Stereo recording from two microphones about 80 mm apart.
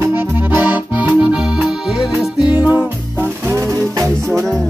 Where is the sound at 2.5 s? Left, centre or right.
Centre.